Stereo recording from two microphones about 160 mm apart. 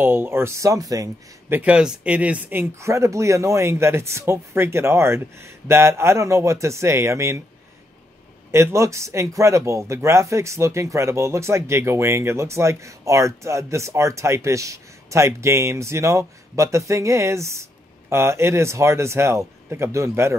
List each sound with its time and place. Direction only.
0.0 s speech: 15° right (ahead or behind)
8.5 s speech: 15° right (ahead or behind)